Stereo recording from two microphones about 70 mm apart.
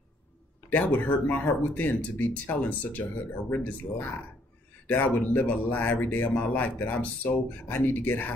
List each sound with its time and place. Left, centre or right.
0.7 s speech: left